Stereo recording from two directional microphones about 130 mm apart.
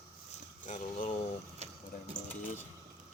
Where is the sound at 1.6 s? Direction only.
55° right (ahead or behind).